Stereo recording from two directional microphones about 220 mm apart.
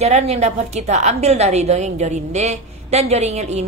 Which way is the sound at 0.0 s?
30° right (ahead or behind).